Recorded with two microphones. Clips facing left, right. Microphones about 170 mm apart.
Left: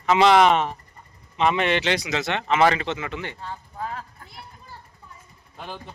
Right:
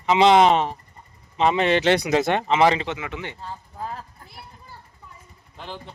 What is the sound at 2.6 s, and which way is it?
Speech, 20° right (ahead or behind).